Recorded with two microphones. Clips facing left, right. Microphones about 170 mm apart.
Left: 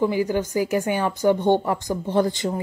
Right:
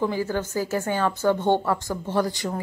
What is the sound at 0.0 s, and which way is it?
Speech, 15° left (ahead or behind).